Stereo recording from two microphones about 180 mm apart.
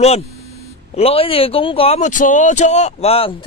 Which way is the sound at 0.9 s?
30° left (ahead or behind).